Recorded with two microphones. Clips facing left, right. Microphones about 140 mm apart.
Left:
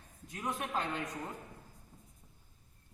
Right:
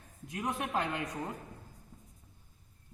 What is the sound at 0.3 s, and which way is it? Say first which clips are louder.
Speech: right 3 dB; 20° right (ahead or behind).